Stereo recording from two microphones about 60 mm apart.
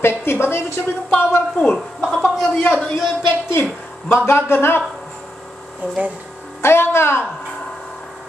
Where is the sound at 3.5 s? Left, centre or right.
Left.